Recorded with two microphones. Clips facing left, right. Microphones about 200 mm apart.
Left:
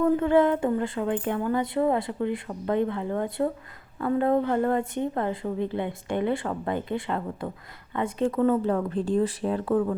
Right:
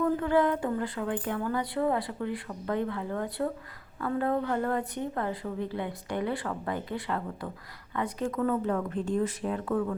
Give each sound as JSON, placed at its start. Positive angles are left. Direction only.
{"t": 0.0, "sound": "a woman's voice", "side_deg": 25}